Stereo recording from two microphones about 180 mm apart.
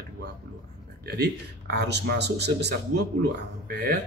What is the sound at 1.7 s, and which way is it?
Speech, 70° right (ahead or behind).